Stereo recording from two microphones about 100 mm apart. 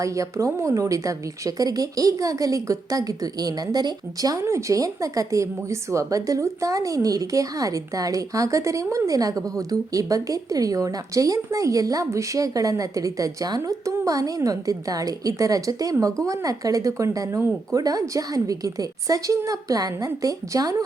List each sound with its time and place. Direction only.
0.0 s a woman's voice: 35° right (ahead or behind)